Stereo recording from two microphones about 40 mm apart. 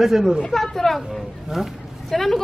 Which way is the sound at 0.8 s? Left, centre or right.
Centre.